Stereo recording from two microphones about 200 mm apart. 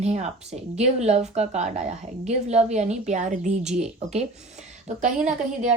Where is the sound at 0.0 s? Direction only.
35° right (ahead or behind).